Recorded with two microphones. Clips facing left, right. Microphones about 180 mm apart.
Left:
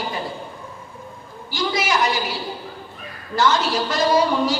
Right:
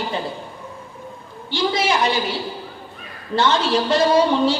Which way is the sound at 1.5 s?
30° right (ahead or behind).